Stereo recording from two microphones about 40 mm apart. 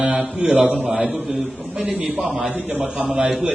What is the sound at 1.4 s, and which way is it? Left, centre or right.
Speech, right.